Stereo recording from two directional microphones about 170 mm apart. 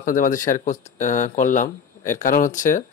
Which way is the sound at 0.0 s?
50° left (ahead or behind).